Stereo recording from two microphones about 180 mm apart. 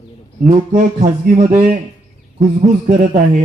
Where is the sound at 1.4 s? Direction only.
35° right (ahead or behind).